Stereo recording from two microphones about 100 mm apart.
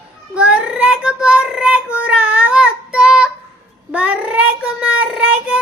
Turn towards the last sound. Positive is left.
turn(degrees=-10)  # may be behind; listen again after turning